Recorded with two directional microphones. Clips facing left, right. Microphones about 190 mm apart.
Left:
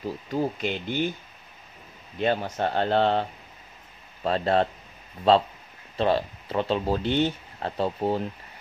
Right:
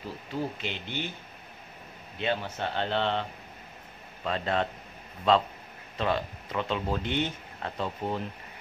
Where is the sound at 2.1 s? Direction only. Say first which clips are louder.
Left 5 dB; 40° left (ahead or behind).